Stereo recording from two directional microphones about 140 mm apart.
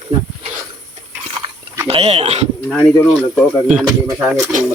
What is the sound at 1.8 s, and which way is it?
Speech, 45° right (ahead or behind).